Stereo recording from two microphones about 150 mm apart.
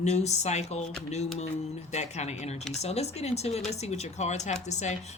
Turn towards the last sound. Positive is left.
turn(degrees=50)  # may be behind; listen again after turning